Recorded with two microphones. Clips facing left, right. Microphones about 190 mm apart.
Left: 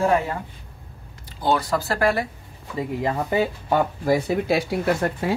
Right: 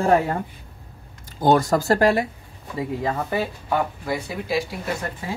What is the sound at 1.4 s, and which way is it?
Speech, 45° right (ahead or behind).